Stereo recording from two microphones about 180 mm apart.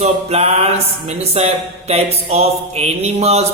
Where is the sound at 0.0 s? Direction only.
35° right (ahead or behind).